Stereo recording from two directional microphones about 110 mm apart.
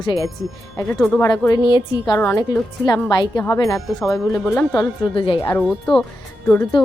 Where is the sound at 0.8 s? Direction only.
10° left (ahead or behind).